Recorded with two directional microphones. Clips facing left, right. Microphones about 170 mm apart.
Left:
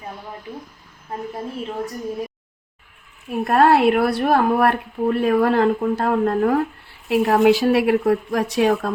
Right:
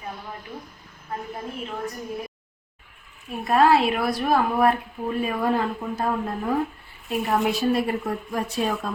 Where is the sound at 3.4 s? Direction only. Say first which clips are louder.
Left 4 dB; 60° left (ahead or behind).